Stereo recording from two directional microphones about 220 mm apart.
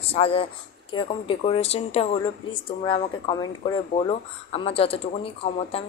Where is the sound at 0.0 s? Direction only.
25° left (ahead or behind).